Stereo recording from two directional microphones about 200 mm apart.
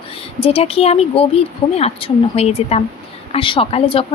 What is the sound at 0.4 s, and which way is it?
Speech, 30° left (ahead or behind).